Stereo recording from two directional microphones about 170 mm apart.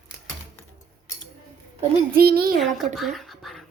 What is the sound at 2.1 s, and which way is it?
Speech, 65° right (ahead or behind).